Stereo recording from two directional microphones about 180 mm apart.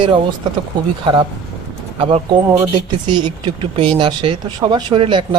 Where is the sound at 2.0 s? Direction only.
30° right (ahead or behind).